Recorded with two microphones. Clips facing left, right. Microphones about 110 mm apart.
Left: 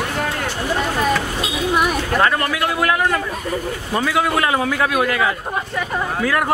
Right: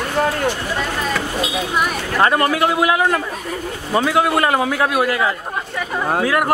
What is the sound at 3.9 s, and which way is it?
A man's voice, 5° right (ahead or behind).